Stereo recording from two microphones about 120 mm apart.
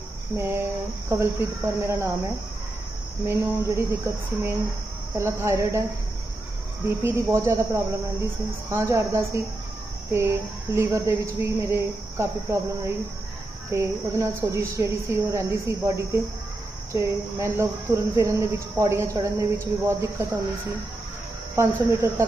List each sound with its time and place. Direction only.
0.3 s speech: 20° right (ahead or behind)
3.2 s speech: 20° right (ahead or behind)
6.8 s speech: 25° right (ahead or behind)
21.5 s speech: 20° right (ahead or behind)